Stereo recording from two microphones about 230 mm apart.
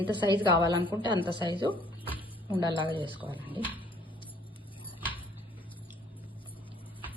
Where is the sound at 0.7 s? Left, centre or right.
Centre.